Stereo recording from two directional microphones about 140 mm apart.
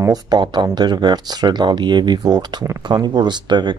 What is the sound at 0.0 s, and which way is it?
Speech, 30° right (ahead or behind).